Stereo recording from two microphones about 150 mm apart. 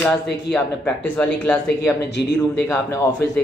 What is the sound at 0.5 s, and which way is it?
A man's voice, 10° left (ahead or behind).